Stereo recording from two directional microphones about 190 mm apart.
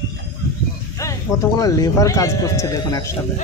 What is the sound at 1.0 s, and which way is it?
Speech, 15° left (ahead or behind).